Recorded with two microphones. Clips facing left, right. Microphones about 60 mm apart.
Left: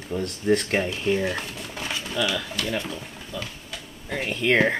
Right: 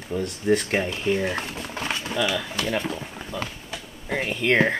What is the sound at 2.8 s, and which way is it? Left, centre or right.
Speech, right.